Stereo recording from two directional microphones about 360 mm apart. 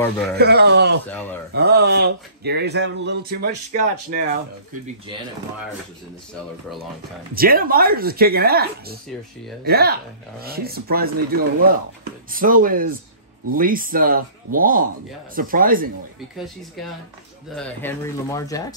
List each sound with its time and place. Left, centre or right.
0.0 s speech: centre
0.4 s speech: right
7.3 s speech: right
17.6 s speech: centre